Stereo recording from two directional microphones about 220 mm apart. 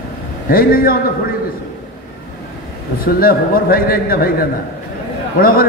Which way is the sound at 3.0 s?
40° left (ahead or behind).